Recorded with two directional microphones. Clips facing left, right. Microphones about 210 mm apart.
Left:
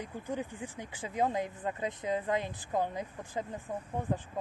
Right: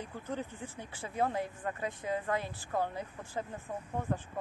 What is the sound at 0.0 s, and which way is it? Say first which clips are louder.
Speech: left 2 dB; 15° left (ahead or behind).